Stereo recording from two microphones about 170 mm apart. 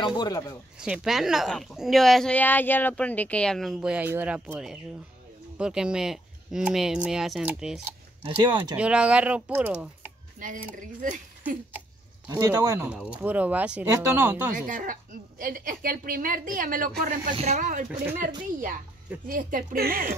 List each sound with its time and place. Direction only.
0.0 s speech: 25° left (ahead or behind)
0.7 s a woman's voice: 5° right (ahead or behind)
8.4 s speech: 25° right (ahead or behind)
8.7 s speech: 5° right (ahead or behind)
10.8 s speech: 50° right (ahead or behind)
12.3 s speech: 20° right (ahead or behind)
14.5 s a woman's voice: 55° right (ahead or behind)
17.4 s speech: 45° right (ahead or behind)
19.2 s a woman's voice: 55° right (ahead or behind)